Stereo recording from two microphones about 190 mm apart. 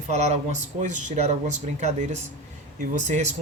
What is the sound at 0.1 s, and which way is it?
Speech, 40° right (ahead or behind).